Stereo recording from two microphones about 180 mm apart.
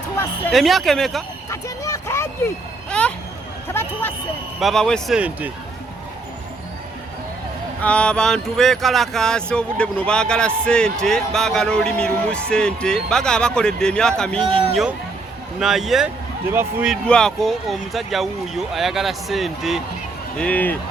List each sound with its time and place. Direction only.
0.5 s speech: centre (ahead or behind)
1.5 s vehicle: 15° left (ahead or behind)
4.6 s speech: 5° left (ahead or behind)
7.8 s speech: 5° left (ahead or behind)
14.4 s speech: 30° right (ahead or behind)
15.5 s speech: centre (ahead or behind)
16.9 s speech: 5° left (ahead or behind)